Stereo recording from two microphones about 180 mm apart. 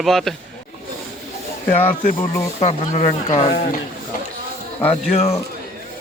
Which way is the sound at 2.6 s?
35° left (ahead or behind).